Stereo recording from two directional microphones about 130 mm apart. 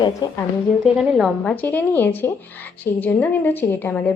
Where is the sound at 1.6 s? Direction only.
15° left (ahead or behind).